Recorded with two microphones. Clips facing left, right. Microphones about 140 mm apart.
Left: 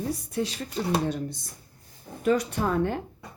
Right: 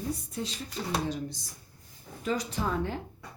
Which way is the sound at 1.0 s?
60° left (ahead or behind).